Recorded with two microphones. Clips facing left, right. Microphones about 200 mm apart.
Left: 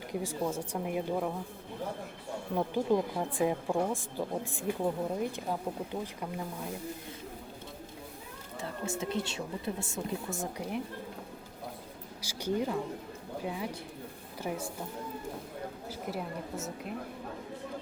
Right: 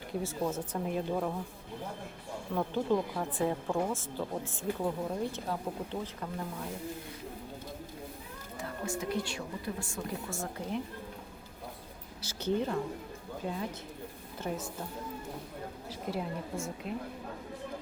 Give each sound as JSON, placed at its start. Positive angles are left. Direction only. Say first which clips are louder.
{"t": 0.1, "sound": "speech", "louder": "even", "side_deg": 15}
{"t": 2.6, "sound": "speech", "louder": "left 1 dB", "side_deg": 15}
{"t": 8.5, "sound": "speech", "louder": "left 1 dB", "side_deg": 25}
{"t": 12.2, "sound": "speech", "louder": "even", "side_deg": 10}
{"t": 15.9, "sound": "a woman's voice", "louder": "right 3 dB", "side_deg": 5}